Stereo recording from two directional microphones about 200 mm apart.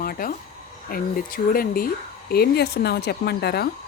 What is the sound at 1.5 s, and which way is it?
Speech, 45° left (ahead or behind).